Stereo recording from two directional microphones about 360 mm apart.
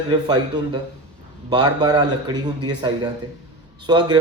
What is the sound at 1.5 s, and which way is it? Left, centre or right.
A man's voice, centre.